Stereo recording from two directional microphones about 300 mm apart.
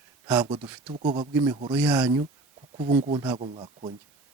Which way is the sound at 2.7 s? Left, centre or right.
Centre.